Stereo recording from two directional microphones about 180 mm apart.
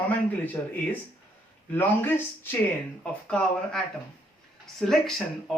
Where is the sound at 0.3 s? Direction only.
10° left (ahead or behind).